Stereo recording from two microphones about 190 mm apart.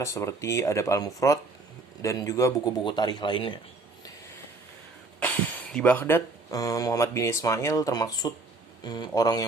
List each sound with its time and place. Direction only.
0.0 s a man's voice: 15° left (ahead or behind)
5.7 s a man's voice: 5° left (ahead or behind)